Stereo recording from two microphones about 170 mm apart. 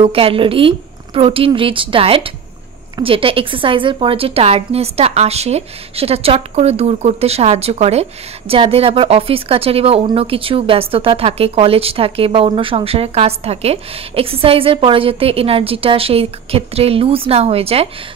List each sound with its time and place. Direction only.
0.0 s a woman's voice: 35° right (ahead or behind)